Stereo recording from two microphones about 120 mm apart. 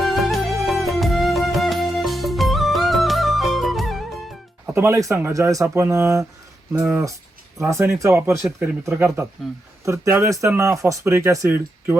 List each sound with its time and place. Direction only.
0.0 s music: centre (ahead or behind)
4.6 s speech: 20° right (ahead or behind)
7.6 s speech: 25° right (ahead or behind)